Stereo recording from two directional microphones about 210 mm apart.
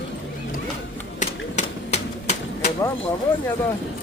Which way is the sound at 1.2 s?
35° left (ahead or behind).